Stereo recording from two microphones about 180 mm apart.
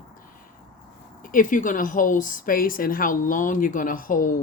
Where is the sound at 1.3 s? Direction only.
45° left (ahead or behind).